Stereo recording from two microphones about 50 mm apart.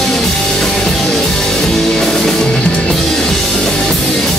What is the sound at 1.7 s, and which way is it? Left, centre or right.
Music, centre.